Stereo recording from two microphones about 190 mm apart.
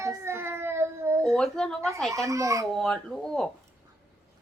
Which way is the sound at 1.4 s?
Centre (ahead or behind).